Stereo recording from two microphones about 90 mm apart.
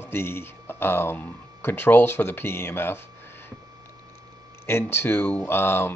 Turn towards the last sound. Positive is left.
turn(degrees=25)  # may be behind; listen again after turning